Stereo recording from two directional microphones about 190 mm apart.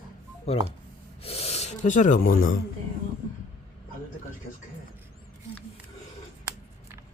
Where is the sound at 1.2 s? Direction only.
30° left (ahead or behind).